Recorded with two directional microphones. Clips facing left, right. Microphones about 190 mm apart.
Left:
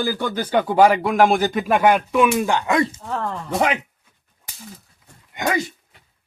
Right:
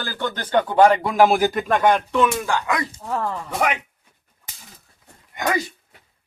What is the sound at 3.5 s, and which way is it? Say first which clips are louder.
Speech: left 3 dB; 30° left (ahead or behind).